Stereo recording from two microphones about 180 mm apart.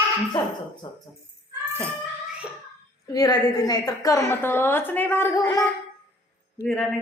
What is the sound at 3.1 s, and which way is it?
A woman's voice, 20° left (ahead or behind).